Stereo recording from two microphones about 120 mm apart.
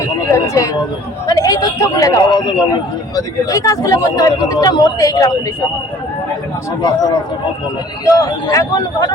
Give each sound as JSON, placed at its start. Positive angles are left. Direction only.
{"t": 0.0, "sound": "a sound", "side_deg": 25}
{"t": 1.3, "sound": "speech", "side_deg": 30}
{"t": 3.2, "sound": "speech", "side_deg": 30}
{"t": 8.0, "sound": "speech", "side_deg": 30}